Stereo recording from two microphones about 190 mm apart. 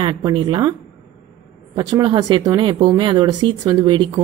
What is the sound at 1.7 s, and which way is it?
Speech, 20° right (ahead or behind).